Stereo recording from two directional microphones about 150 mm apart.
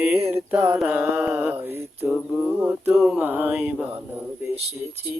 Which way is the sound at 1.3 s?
10° right (ahead or behind).